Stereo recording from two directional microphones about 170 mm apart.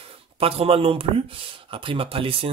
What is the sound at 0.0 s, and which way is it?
Speech, 35° right (ahead or behind).